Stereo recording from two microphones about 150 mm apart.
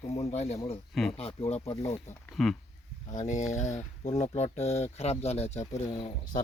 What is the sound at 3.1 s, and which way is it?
Speech, 55° left (ahead or behind).